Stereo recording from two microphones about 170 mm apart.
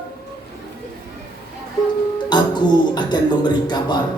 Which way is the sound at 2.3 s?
25° left (ahead or behind).